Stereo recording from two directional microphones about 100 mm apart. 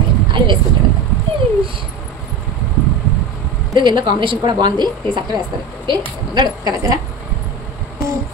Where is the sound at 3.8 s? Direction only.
50° right (ahead or behind).